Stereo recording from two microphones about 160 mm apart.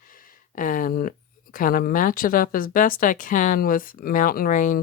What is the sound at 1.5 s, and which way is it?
Speech, 60° left (ahead or behind).